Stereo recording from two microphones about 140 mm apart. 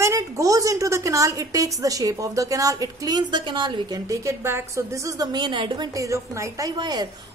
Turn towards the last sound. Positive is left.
turn(degrees=-30)  # may be behind; listen again after turning